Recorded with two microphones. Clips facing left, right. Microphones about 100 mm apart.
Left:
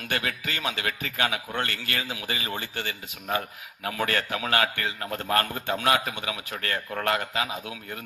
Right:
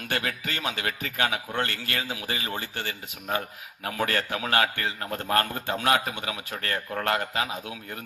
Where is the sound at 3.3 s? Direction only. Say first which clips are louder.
Left 1 dB; 35° right (ahead or behind).